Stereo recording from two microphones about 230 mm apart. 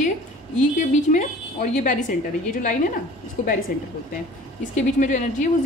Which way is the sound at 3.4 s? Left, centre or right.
Left.